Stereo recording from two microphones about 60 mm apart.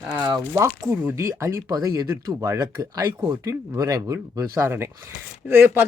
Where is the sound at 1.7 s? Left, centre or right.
Right.